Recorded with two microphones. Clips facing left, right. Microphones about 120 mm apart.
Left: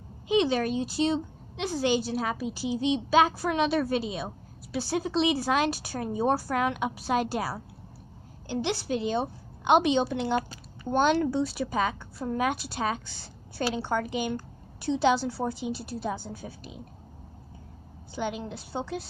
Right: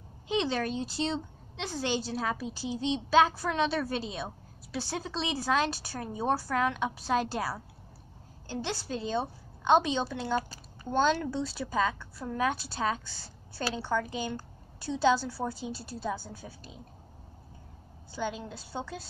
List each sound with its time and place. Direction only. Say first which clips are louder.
0.3 s a woman's voice: left 5 dB; 10° left (ahead or behind)
10.9 s a woman's voice: left 3 dB; 15° left (ahead or behind)
18.1 s a woman's voice: left 3 dB; 15° left (ahead or behind)